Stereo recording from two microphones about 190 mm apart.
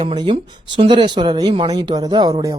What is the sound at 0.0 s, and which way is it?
Speech, 25° right (ahead or behind).